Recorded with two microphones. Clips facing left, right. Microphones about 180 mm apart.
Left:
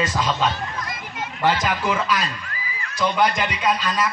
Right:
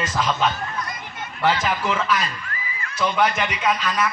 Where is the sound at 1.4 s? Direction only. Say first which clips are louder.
Even; 15° left (ahead or behind).